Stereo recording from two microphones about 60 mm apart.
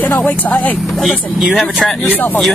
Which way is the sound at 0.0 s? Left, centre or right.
Left.